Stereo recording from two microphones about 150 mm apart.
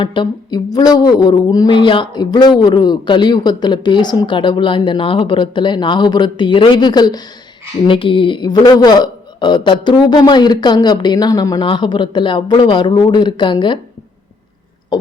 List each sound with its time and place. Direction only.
0.0 s speech: 30° left (ahead or behind)